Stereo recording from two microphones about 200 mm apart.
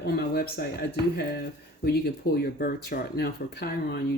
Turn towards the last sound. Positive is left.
turn(degrees=55)  # may be behind; listen again after turning